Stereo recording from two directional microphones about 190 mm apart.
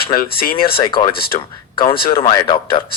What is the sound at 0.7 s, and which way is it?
Speech, 25° left (ahead or behind).